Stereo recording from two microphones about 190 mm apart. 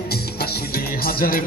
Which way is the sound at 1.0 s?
50° left (ahead or behind).